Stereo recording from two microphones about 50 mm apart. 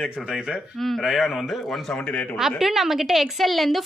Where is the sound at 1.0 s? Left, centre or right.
Centre.